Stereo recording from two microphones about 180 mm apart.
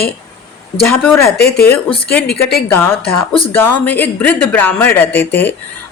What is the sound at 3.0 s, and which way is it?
Speech, 30° left (ahead or behind).